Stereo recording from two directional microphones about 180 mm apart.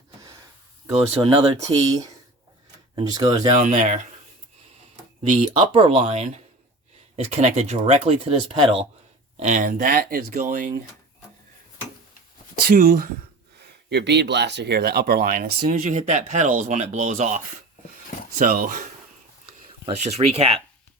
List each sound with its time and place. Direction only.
1.3 s speech: 40° right (ahead or behind)
1.9 s speech: 20° right (ahead or behind)
3.6 s speech: 45° right (ahead or behind)
5.5 s speech: 30° right (ahead or behind)
9.4 s speech: 45° right (ahead or behind)
10.4 s speech: 45° right (ahead or behind)
12.6 s speech: 50° right (ahead or behind)
13.9 s speech: 70° right (ahead or behind); by 18.9 s 45° right (ahead or behind)
19.8 s speech: 35° right (ahead or behind)